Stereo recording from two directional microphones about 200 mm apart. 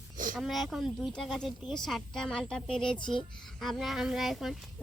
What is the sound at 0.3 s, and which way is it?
A woman's voice, centre (ahead or behind).